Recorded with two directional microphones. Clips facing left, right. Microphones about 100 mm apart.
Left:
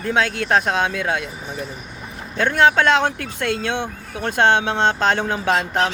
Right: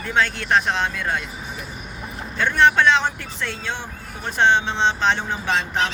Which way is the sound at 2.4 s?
50° left (ahead or behind).